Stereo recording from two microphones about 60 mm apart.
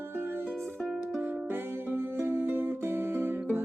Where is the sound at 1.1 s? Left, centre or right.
Right.